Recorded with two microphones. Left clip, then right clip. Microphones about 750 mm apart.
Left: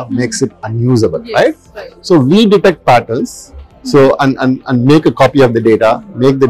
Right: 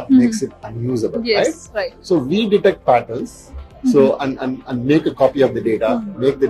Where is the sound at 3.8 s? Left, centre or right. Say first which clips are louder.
Left 6 dB; left.